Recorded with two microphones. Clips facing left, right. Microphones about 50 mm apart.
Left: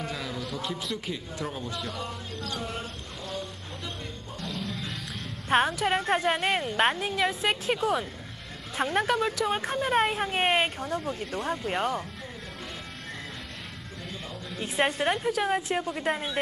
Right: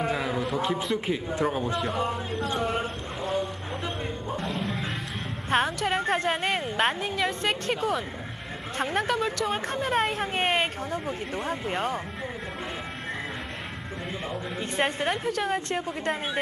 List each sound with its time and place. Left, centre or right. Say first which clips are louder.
0.0 s a sound: right 7 dB; right
5.5 s speech: left 1 dB; centre
10.9 s speech: even; centre
14.6 s speech: left 1 dB; centre